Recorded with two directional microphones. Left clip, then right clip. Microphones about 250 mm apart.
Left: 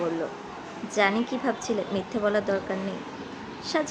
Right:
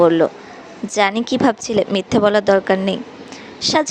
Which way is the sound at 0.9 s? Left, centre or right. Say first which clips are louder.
Right 8 dB; right.